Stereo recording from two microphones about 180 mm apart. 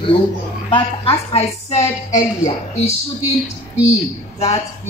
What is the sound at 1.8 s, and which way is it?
Speech, 15° left (ahead or behind).